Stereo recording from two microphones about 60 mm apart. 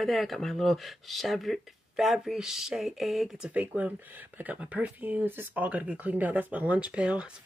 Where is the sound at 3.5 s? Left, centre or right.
Right.